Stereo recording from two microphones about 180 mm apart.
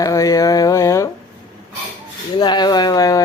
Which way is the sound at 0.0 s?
20° left (ahead or behind).